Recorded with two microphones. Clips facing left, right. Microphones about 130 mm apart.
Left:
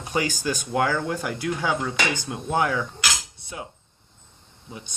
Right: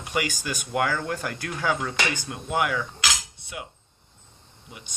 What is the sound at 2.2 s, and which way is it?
Speech, 30° left (ahead or behind).